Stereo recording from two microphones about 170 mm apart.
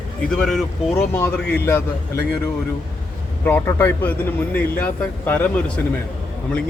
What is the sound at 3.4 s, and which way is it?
A man's voice, 10° left (ahead or behind).